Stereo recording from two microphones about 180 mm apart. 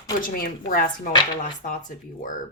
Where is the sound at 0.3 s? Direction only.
55° left (ahead or behind).